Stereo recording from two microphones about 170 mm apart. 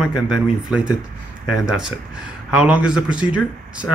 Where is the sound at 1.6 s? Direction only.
5° right (ahead or behind).